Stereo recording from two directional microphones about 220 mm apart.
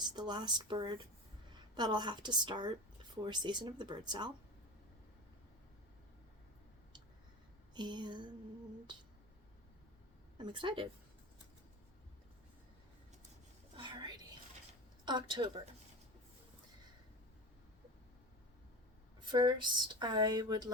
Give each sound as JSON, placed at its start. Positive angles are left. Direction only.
{"t": 0.0, "sound": "speech", "side_deg": -20}
{"t": 7.7, "sound": "speech", "side_deg": -20}
{"t": 10.3, "sound": "speech", "side_deg": -20}
{"t": 13.7, "sound": "whispering", "side_deg": -20}
{"t": 15.0, "sound": "speech", "side_deg": -20}
{"t": 19.2, "sound": "speech", "side_deg": -20}